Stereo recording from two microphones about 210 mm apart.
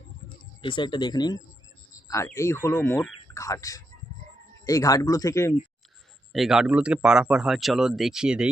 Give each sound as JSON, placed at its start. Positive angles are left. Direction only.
{"t": 0.6, "sound": "speech", "side_deg": 25}
{"t": 6.3, "sound": "speech", "side_deg": 0}